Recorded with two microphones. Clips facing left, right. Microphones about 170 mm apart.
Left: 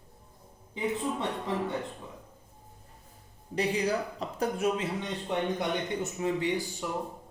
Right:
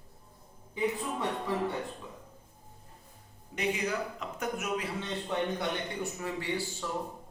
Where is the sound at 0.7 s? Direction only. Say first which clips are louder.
Left 1 dB; 25° left (ahead or behind).